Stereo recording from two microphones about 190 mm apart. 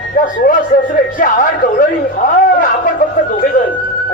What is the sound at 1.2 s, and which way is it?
Speech, 45° left (ahead or behind).